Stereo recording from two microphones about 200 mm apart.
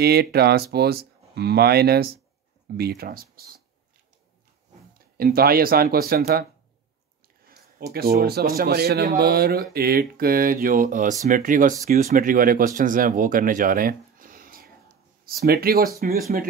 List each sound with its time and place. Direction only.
0.0 s speech: 50° right (ahead or behind)
4.9 s speech: 50° right (ahead or behind)
7.9 s speech: 50° right (ahead or behind)